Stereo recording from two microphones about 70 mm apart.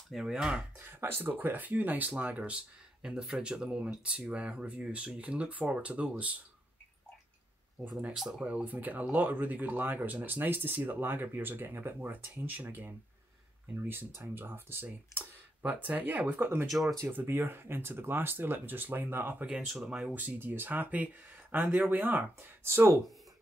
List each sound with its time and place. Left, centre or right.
0.1 s speech: centre
0.7 s speech: right
3.0 s speech: centre
8.1 s speech: centre
8.6 s speech: right
16.6 s speech: centre
17.1 s speech: right
22.4 s speech: right